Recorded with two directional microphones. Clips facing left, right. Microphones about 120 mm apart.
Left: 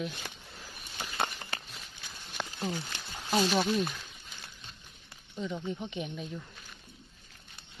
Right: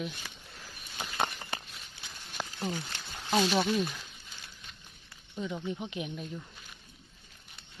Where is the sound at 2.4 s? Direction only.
10° right (ahead or behind).